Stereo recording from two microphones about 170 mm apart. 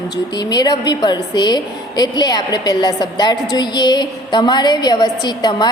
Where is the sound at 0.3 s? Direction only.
25° left (ahead or behind).